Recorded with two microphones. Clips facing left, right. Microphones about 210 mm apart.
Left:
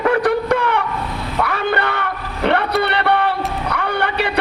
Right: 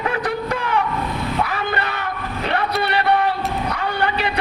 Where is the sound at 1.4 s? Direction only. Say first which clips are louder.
Left 4 dB; 60° left (ahead or behind).